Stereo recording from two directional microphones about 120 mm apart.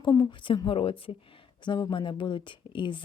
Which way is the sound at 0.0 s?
35° left (ahead or behind).